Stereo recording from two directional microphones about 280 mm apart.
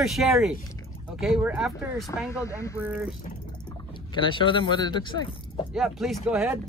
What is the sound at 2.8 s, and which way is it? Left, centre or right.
Speech, centre.